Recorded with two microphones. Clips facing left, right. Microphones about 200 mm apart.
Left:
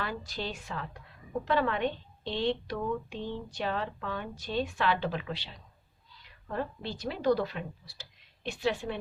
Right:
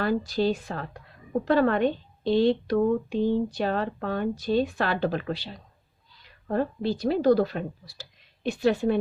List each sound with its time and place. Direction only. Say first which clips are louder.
0.0 s a woman's voice: right 12 dB; 40° right (ahead or behind)